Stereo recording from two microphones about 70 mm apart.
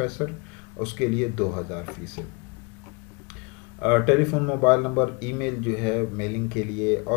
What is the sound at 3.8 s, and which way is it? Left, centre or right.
Speech, centre.